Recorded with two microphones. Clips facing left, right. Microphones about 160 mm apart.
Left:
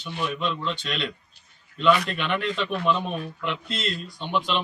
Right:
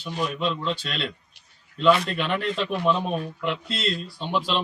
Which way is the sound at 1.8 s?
30° right (ahead or behind).